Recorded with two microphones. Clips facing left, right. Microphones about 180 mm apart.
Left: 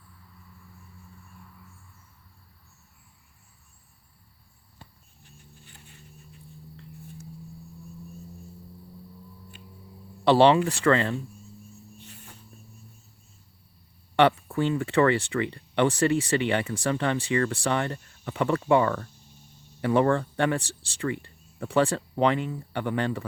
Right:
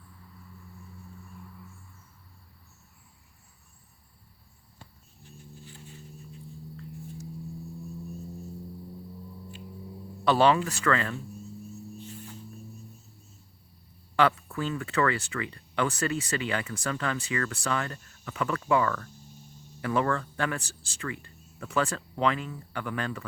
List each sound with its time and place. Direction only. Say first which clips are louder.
5.2 s music: right 6 dB; 60° left (ahead or behind)
10.2 s speech: left 4 dB; 30° left (ahead or behind)
11.9 s snake: right 7 dB; 65° left (ahead or behind)
14.2 s speech: left 4 dB; 30° left (ahead or behind)